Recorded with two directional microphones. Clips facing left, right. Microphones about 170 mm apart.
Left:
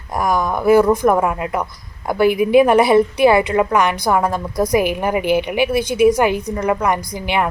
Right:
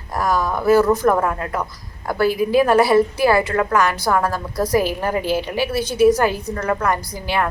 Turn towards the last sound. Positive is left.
turn(degrees=15)  # may be behind; listen again after turning